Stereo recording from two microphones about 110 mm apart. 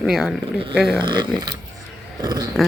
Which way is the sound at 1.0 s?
45° right (ahead or behind).